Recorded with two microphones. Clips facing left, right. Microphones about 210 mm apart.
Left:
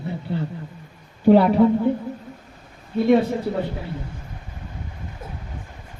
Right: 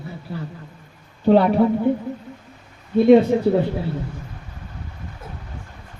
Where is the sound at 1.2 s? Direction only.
10° left (ahead or behind).